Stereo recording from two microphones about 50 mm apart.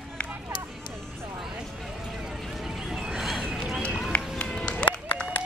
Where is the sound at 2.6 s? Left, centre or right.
Centre.